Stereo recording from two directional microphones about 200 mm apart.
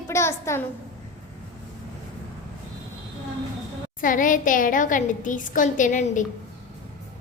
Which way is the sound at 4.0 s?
40° left (ahead or behind).